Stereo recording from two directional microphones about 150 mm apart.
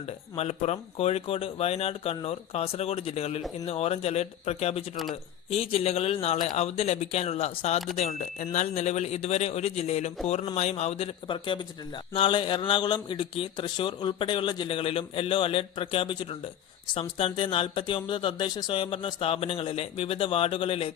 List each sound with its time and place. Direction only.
0.0 s speech: 45° left (ahead or behind)